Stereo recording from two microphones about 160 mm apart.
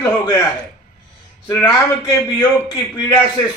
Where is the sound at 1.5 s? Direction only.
20° left (ahead or behind).